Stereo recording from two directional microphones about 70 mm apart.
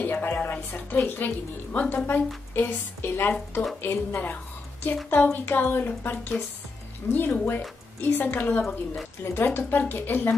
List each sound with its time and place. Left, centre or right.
0.0 s a woman's voice: left